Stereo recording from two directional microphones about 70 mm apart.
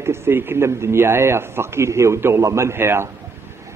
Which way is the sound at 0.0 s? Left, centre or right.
Right.